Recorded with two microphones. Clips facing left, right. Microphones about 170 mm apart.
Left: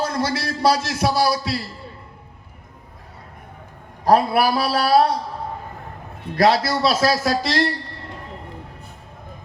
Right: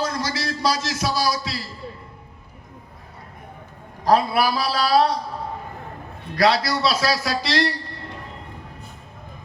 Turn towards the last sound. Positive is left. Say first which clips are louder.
# left 2 dB
turn(degrees=50)  # may be behind; listen again after turning